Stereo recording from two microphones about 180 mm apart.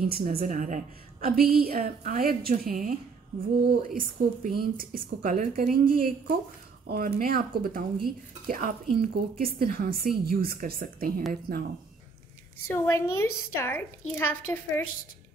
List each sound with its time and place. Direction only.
0.2 s speech: 50° right (ahead or behind)
12.7 s a woman's voice: 15° left (ahead or behind)